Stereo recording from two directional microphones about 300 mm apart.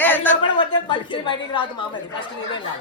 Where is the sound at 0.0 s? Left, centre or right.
Centre.